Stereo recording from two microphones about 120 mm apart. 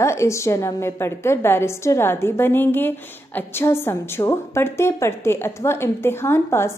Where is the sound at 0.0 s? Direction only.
25° left (ahead or behind).